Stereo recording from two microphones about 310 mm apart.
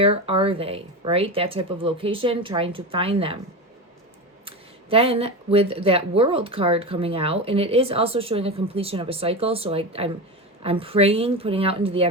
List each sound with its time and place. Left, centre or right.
0.0 s speech: centre
4.4 s speech: centre